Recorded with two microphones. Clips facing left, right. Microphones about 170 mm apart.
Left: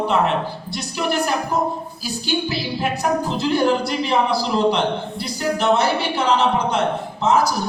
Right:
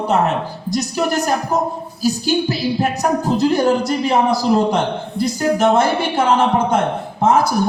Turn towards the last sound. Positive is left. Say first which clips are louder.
# right 3 dB
turn(degrees=-50)  # may be behind; listen again after turning